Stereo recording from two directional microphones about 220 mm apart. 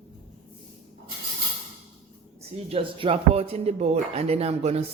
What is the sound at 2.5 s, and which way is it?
Speech, 25° right (ahead or behind).